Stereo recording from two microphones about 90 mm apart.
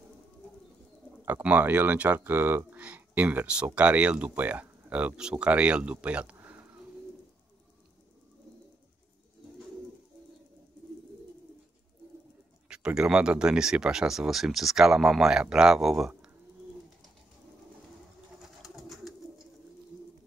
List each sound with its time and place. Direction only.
1.2 s speech: 20° right (ahead or behind)
6.3 s pigeon: 20° right (ahead or behind)
12.6 s speech: 10° right (ahead or behind)
18.6 s pigeon: centre (ahead or behind)